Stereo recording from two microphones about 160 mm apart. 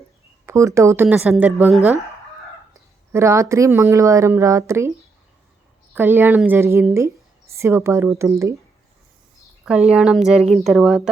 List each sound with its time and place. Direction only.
0.4 s speech: 20° right (ahead or behind)
1.0 s speech: 5° right (ahead or behind)
3.1 s speech: 15° right (ahead or behind)
5.9 s speech: 10° right (ahead or behind)
9.9 s a woman's voice: 5° right (ahead or behind)